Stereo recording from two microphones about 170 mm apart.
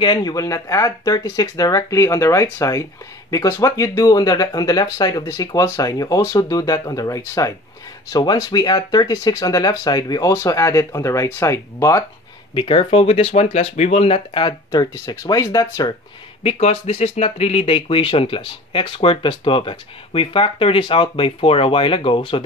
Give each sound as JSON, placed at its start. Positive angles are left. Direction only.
{"t": 0.0, "sound": "speech", "side_deg": 25}
{"t": 12.5, "sound": "speech", "side_deg": 30}
{"t": 16.4, "sound": "speech", "side_deg": 35}